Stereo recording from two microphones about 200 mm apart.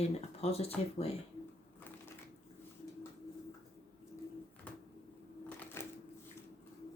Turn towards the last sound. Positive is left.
turn(degrees=10)  # may be behind; listen again after turning